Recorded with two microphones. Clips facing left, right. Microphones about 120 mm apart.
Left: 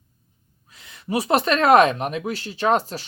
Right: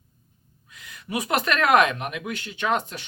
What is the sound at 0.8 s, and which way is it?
Speech, 30° left (ahead or behind).